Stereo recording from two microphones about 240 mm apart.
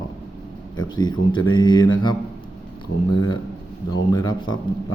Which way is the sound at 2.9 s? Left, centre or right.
Left.